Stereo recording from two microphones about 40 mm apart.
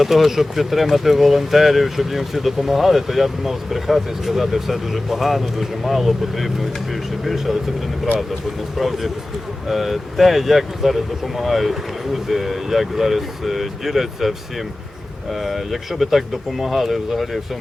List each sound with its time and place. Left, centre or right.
0.0 s speech: centre
8.8 s speech: centre